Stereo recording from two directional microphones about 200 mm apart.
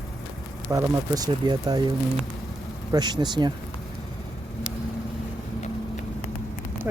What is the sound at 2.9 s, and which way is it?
Speech, 20° right (ahead or behind).